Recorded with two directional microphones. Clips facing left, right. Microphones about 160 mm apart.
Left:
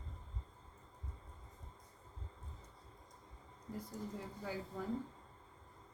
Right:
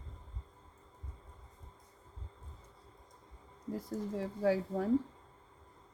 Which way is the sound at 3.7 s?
90° right.